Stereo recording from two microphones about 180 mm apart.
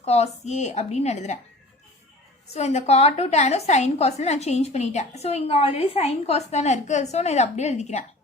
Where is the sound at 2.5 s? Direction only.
35° left (ahead or behind).